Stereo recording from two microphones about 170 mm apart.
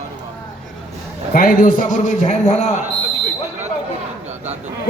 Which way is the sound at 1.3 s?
55° left (ahead or behind).